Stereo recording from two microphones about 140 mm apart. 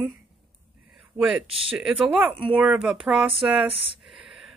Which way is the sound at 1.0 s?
10° right (ahead or behind).